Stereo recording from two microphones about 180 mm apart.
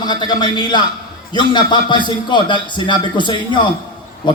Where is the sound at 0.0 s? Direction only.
25° left (ahead or behind).